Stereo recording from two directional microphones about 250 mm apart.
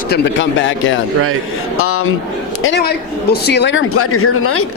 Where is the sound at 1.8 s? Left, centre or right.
Left.